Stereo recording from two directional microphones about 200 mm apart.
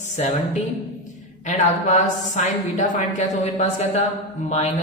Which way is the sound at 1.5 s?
35° left (ahead or behind).